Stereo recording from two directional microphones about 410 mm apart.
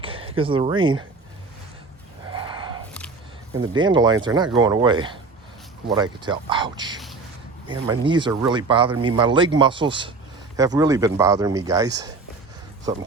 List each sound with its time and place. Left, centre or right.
0.0 s speech: centre
2.3 s a sound: centre
3.6 s speech: centre
11.9 s speech: right